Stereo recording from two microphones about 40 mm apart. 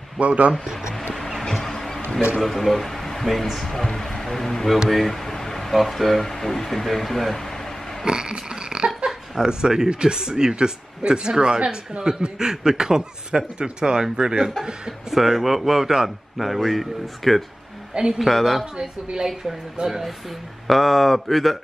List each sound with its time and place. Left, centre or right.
0.2 s speech: right
1.5 s a sound: centre
2.4 s speech: centre
4.8 s a sound: centre
5.8 s speech: centre
8.0 s burping: centre
9.3 s a man's voice: centre
17.9 s a man's voice: centre
18.2 s speech: centre
18.8 s a man's voice: centre
20.6 s speech: centre